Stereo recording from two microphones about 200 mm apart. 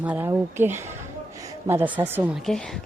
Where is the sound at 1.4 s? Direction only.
15° right (ahead or behind).